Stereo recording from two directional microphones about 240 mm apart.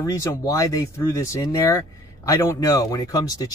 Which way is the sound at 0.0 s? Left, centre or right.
Centre.